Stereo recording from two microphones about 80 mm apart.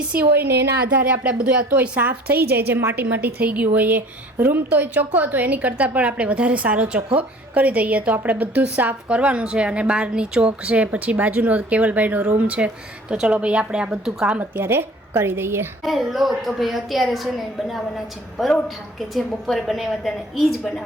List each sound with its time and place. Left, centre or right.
0.1 s a woman's voice: right
14.6 s a woman's voice: right
15.8 s a woman's voice: centre